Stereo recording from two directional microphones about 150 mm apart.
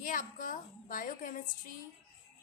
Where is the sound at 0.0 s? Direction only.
65° left (ahead or behind).